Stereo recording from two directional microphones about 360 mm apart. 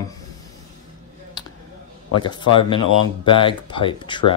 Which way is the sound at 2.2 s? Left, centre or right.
Centre.